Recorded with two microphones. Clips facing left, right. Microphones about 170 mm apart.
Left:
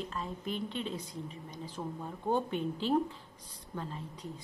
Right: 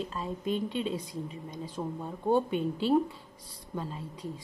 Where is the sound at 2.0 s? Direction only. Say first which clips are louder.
Right 5 dB; 10° right (ahead or behind).